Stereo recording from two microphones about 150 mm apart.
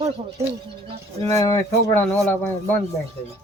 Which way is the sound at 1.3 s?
20° left (ahead or behind).